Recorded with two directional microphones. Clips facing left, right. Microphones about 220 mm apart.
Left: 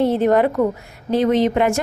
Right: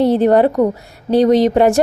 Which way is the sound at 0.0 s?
35° right (ahead or behind).